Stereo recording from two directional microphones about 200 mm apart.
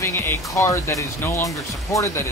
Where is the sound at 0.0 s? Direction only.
15° left (ahead or behind).